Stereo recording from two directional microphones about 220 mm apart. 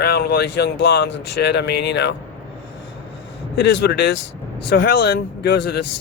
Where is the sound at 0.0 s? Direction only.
45° left (ahead or behind).